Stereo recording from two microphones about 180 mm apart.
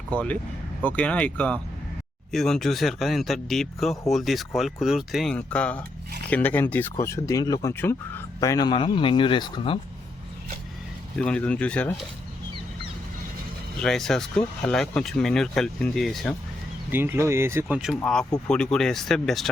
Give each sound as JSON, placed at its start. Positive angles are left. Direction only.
{"t": 0.1, "sound": "speech", "side_deg": 5}
{"t": 11.2, "sound": "speech", "side_deg": 5}
{"t": 13.8, "sound": "speech", "side_deg": 0}
{"t": 16.9, "sound": "speech", "side_deg": -15}
{"t": 18.0, "sound": "speech", "side_deg": 5}